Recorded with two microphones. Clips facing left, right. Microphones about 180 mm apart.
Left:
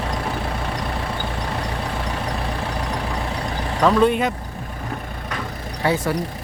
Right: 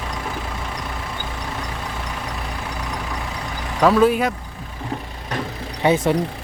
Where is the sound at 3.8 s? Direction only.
5° right (ahead or behind).